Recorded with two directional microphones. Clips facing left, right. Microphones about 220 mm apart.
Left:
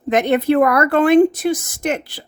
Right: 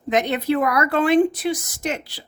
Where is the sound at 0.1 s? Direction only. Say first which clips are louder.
Left 5 dB; 55° left (ahead or behind).